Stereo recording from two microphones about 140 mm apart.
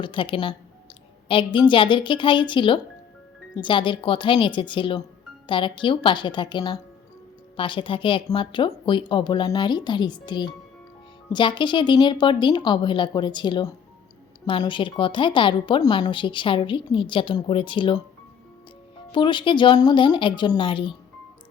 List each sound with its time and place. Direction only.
0.0 s a woman's voice: 35° left (ahead or behind)
1.5 s a woman's voice: 35° left (ahead or behind)
19.1 s a woman's voice: 35° left (ahead or behind)